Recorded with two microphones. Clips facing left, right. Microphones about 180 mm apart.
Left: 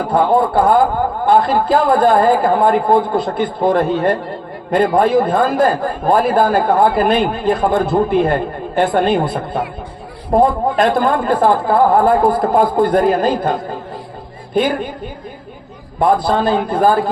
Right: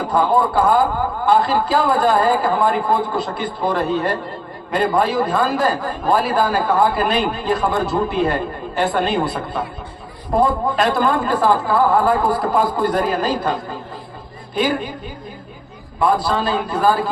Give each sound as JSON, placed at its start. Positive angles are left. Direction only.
{"t": 0.1, "sound": "a man's voice", "side_deg": 55}
{"t": 16.0, "sound": "a man's voice", "side_deg": 50}